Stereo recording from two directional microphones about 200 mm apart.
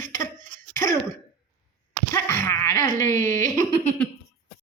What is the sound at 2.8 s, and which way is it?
Speech, 40° right (ahead or behind).